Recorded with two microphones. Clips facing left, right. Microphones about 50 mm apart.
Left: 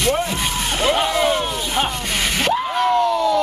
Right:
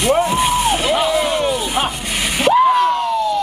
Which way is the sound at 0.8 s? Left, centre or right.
Centre.